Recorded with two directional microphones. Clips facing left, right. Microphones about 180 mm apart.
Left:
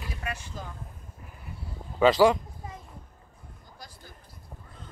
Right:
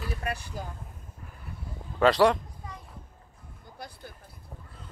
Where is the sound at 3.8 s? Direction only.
60° right (ahead or behind).